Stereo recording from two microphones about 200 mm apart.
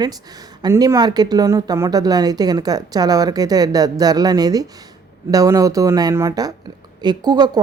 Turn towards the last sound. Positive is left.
turn(degrees=-20)  # may be behind; listen again after turning